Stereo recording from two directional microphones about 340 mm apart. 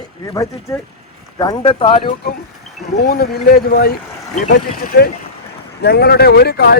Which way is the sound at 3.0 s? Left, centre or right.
Left.